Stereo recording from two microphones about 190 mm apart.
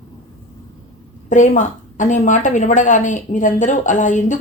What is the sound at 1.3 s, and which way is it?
A woman's voice, 40° left (ahead or behind).